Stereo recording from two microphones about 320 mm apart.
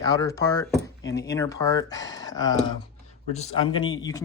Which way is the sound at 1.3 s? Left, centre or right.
Centre.